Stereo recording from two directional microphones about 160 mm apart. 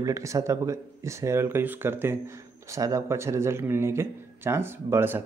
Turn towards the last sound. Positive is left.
turn(degrees=-15)  # may be behind; listen again after turning